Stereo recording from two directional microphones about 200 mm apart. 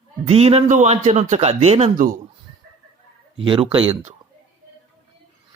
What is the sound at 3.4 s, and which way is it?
Speech, 25° right (ahead or behind).